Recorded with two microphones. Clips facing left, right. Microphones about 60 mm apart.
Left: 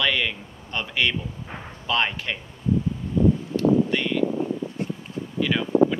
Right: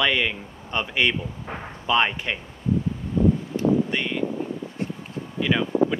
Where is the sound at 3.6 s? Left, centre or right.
Centre.